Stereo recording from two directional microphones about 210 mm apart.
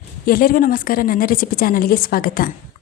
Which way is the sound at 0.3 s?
45° left (ahead or behind).